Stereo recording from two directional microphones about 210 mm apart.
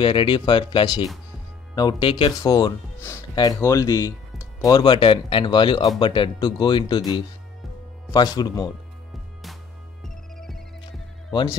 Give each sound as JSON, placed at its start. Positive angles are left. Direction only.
{"t": 0.0, "sound": "speech", "side_deg": 25}
{"t": 10.0, "sound": "music", "side_deg": 0}